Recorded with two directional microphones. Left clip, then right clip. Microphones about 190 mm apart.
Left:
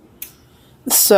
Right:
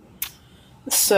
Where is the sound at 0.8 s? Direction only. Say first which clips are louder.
Left 5 dB; 35° left (ahead or behind).